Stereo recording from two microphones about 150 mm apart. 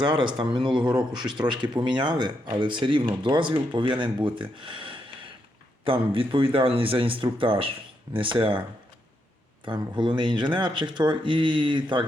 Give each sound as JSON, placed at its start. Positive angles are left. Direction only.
{"t": 0.0, "sound": "speech", "side_deg": -30}
{"t": 4.5, "sound": "a sound", "side_deg": -35}
{"t": 5.8, "sound": "speech", "side_deg": -35}
{"t": 9.6, "sound": "speech", "side_deg": -30}